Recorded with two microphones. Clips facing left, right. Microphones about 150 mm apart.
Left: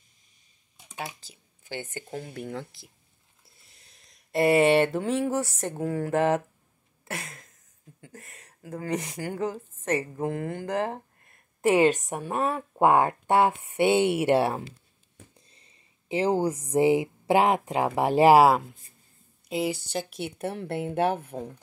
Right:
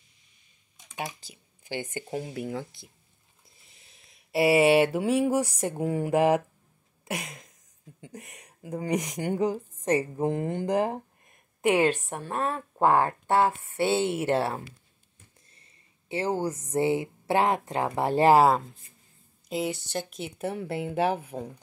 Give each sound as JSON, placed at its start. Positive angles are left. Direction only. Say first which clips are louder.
{"t": 0.9, "sound": "speech", "louder": "right 2 dB", "side_deg": -15}
{"t": 7.1, "sound": "a sound", "louder": "right 3 dB", "side_deg": -15}
{"t": 8.0, "sound": "speech", "louder": "right 4 dB", "side_deg": -15}
{"t": 11.6, "sound": "a woman's voice", "louder": "left 2 dB", "side_deg": 5}